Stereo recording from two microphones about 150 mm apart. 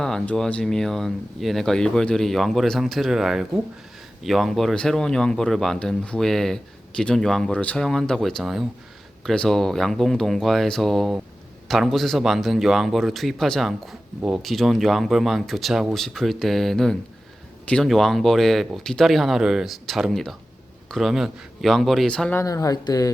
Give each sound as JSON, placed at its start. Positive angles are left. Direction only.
{"t": 0.0, "sound": "speech", "side_deg": 5}
{"t": 22.4, "sound": "speech", "side_deg": 25}